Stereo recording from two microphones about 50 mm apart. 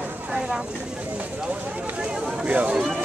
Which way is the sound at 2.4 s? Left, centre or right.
Right.